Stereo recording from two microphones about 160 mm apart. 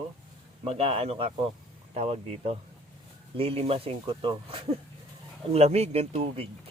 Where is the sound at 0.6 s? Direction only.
35° right (ahead or behind).